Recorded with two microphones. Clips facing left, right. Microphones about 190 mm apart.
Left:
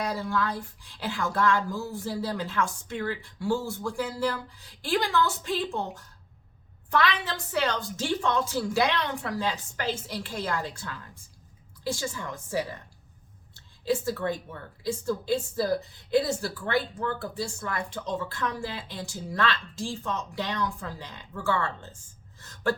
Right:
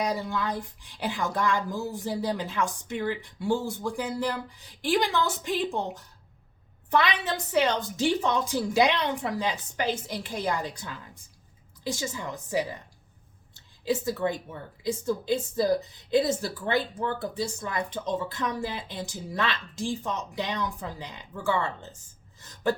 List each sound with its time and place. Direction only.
0.0 s speech: 20° right (ahead or behind)
13.8 s a woman's voice: 15° right (ahead or behind)
22.4 s a sound: 15° right (ahead or behind)